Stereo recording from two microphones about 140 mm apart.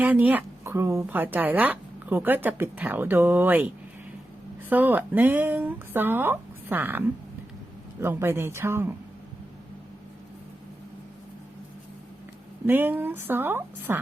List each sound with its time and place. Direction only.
0.0 s a woman's voice: 10° right (ahead or behind)
4.7 s a woman's voice: 15° right (ahead or behind)
12.6 s a woman's voice: 15° right (ahead or behind)